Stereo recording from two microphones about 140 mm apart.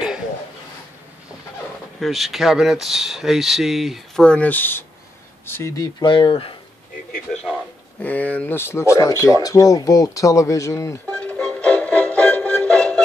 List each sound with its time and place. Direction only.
2.0 s speech: centre (ahead or behind); by 6.0 s 20° left (ahead or behind)
6.0 s speech: 35° left (ahead or behind)
7.5 s speech: 10° left (ahead or behind)
11.1 s music: 10° left (ahead or behind)